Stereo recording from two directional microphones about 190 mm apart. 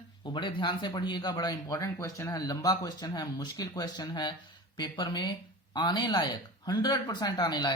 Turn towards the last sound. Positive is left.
turn(degrees=20)  # may be behind; listen again after turning